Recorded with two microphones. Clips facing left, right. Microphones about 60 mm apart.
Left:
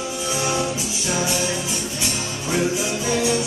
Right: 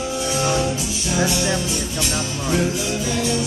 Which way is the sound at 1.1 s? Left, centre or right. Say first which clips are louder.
Right 3 dB; centre.